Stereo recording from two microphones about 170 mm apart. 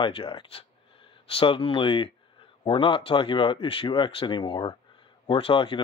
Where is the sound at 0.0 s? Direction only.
30° left (ahead or behind).